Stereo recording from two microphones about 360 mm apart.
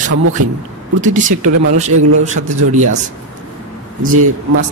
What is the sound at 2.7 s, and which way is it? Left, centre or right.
Speech, right.